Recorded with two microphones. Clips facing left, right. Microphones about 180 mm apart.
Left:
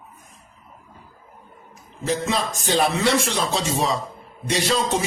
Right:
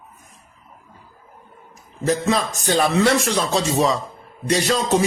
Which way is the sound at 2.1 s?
50° right (ahead or behind).